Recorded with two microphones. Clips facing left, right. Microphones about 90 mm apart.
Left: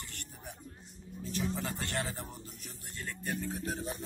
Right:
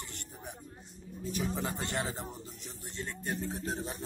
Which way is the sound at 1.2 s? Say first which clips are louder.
Right 1 dB; 15° right (ahead or behind).